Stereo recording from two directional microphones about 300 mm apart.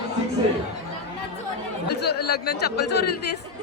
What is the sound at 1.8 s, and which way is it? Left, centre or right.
Speech, left.